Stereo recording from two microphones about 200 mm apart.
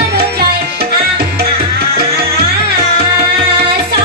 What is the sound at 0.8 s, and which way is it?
Tabla, 50° right (ahead or behind).